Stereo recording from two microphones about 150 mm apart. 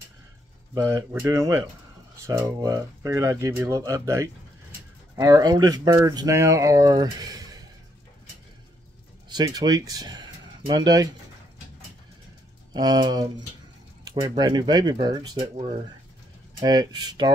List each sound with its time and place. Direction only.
0.7 s speech: 15° right (ahead or behind)
9.3 s speech: 25° right (ahead or behind)
12.7 s speech: 25° right (ahead or behind)
15.3 s speech: 45° right (ahead or behind)
16.5 s speech: 30° right (ahead or behind)